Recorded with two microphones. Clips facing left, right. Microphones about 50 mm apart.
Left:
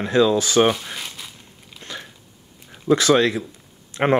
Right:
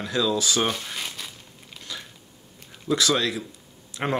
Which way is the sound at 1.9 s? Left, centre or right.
Left.